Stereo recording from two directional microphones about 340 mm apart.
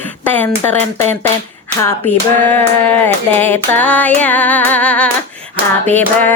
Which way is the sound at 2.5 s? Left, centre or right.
Centre.